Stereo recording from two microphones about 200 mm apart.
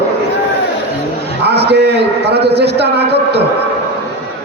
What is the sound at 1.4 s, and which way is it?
A man's voice, 55° right (ahead or behind).